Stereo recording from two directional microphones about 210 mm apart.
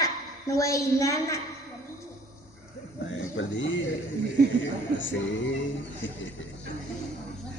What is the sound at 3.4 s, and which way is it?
Speech, 65° left (ahead or behind).